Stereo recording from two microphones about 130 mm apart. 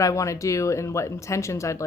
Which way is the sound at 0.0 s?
25° left (ahead or behind).